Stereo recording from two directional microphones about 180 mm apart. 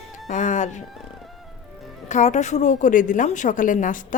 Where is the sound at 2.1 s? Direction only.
40° left (ahead or behind).